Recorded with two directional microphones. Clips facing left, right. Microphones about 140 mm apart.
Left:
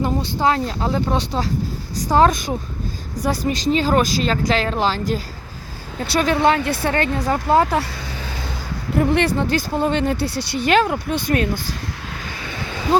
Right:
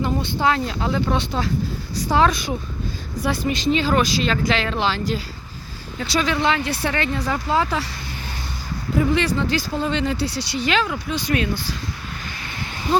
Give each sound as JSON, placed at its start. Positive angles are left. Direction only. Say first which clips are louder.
{"t": 0.0, "sound": "speech", "louder": "left 2 dB", "side_deg": 40}
{"t": 9.0, "sound": "speech", "louder": "left 2 dB", "side_deg": 55}